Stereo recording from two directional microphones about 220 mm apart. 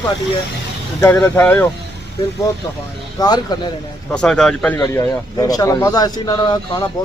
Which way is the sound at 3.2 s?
15° left (ahead or behind).